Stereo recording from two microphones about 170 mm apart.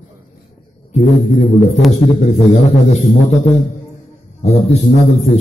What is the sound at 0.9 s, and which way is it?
A man's voice, 45° left (ahead or behind).